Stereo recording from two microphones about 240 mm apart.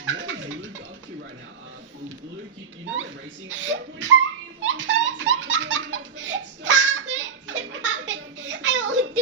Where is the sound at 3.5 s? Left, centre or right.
Right.